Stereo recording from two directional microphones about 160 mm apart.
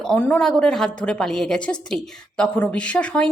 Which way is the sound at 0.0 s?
5° left (ahead or behind).